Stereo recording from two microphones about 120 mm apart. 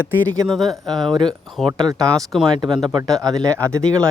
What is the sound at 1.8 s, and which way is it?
Speech, 30° right (ahead or behind).